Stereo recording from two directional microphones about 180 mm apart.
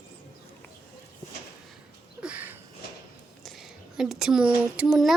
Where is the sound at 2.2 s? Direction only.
10° right (ahead or behind).